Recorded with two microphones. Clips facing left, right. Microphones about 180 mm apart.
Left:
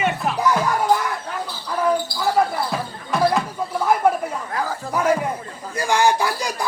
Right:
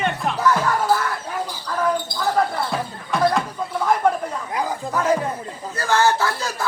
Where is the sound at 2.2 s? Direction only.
5° left (ahead or behind).